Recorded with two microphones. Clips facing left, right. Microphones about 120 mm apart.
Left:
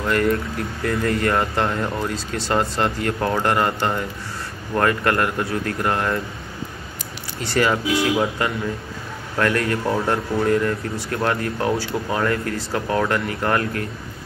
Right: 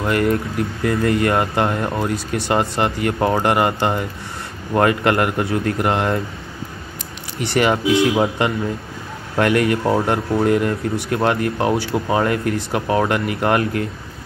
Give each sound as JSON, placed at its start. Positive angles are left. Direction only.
{"t": 0.0, "sound": "speech", "side_deg": -10}
{"t": 2.1, "sound": "speech", "side_deg": -60}
{"t": 2.8, "sound": "a man's voice", "side_deg": -10}
{"t": 7.5, "sound": "a man's voice", "side_deg": -20}